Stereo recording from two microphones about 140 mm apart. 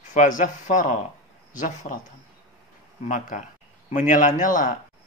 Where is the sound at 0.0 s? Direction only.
60° left (ahead or behind).